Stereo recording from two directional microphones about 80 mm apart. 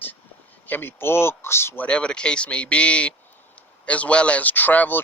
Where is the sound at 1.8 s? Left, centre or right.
Centre.